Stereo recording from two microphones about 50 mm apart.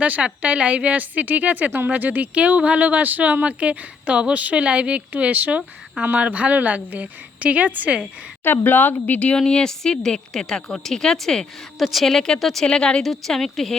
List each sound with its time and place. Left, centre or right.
0.0 s a woman's voice: right
8.4 s speech: left
9.4 s a woman's voice: centre
11.8 s a woman's voice: centre
12.0 s a woman's voice: centre
12.6 s a woman's voice: centre
13.0 s a woman's voice: centre